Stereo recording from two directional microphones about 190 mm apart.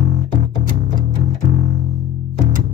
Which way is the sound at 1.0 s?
45° left (ahead or behind).